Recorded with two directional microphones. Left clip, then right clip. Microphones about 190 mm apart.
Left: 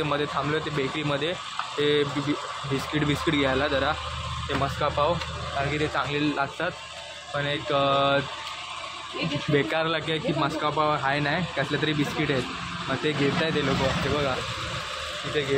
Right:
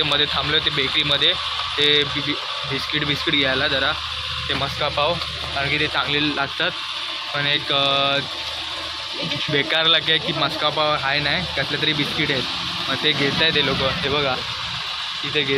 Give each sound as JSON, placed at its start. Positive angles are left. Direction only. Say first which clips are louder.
{"t": 0.0, "sound": "speech", "louder": "right 7 dB", "side_deg": 5}
{"t": 7.8, "sound": "speech", "louder": "even", "side_deg": 15}
{"t": 9.5, "sound": "speech", "louder": "right 7 dB", "side_deg": 5}